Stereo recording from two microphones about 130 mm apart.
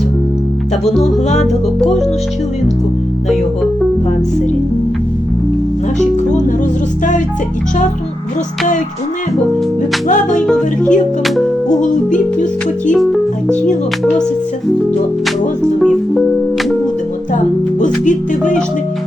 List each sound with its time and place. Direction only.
0.9 s music: 60° left (ahead or behind)
10.1 s music: 80° left
10.4 s music: 5° left (ahead or behind)
12.9 s speech: 5° left (ahead or behind)
17.3 s music: 75° left (ahead or behind)